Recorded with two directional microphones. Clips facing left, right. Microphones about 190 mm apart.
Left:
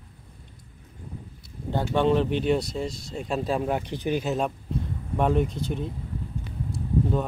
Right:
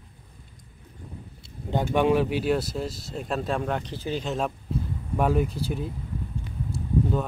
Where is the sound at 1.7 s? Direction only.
10° right (ahead or behind); by 4.2 s 15° left (ahead or behind).